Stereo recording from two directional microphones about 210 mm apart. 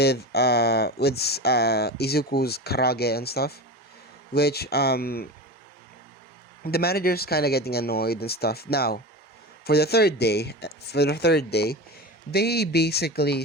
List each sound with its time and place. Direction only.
0.0 s speech: 50° left (ahead or behind)
6.7 s speech: 50° left (ahead or behind)